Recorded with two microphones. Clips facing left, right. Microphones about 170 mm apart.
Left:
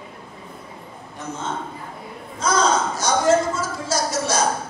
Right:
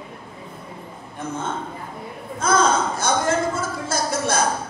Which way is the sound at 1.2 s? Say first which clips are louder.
Right 2 dB; 55° right (ahead or behind).